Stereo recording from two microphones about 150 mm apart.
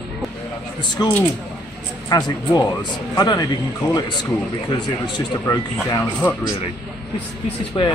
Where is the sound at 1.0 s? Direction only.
30° left (ahead or behind).